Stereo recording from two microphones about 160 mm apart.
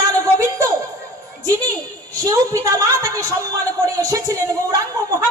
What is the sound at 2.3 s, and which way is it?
A woman's voice, 20° right (ahead or behind).